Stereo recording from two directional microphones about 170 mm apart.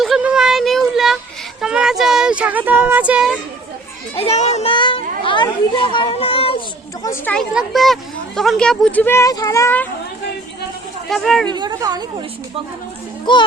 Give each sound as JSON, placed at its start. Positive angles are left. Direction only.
{"t": 0.0, "sound": "a sound", "side_deg": -5}
{"t": 1.6, "sound": "speech", "side_deg": -5}
{"t": 4.1, "sound": "a child's voice", "side_deg": 35}
{"t": 7.0, "sound": "speech", "side_deg": 15}
{"t": 7.3, "sound": "speech", "side_deg": 0}
{"t": 11.1, "sound": "speech", "side_deg": 0}
{"t": 11.5, "sound": "a woman's voice", "side_deg": -25}
{"t": 13.3, "sound": "a child's voice", "side_deg": 30}